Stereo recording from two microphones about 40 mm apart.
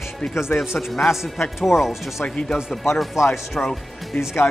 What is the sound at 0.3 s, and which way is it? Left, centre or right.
Speech, left.